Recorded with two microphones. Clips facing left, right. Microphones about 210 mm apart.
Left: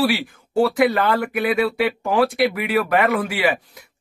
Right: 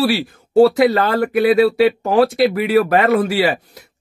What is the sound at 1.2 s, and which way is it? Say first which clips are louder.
Speech: right 7 dB; 40° right (ahead or behind).